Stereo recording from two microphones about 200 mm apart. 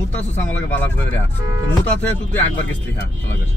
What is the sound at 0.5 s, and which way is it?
Speech, 10° left (ahead or behind).